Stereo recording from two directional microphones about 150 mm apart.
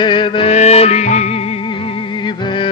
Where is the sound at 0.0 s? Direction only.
35° left (ahead or behind).